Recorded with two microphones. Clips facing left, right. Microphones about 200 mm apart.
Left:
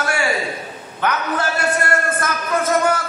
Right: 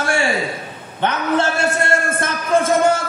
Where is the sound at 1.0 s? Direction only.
25° right (ahead or behind).